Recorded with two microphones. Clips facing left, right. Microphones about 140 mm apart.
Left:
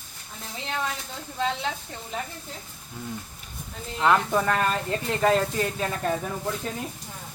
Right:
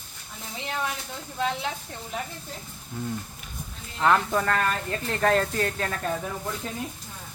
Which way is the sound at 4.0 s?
5° left (ahead or behind).